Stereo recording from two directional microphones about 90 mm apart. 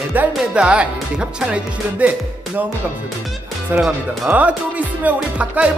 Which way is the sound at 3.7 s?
20° right (ahead or behind).